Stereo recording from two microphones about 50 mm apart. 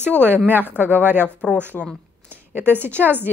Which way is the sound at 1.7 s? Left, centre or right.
Left.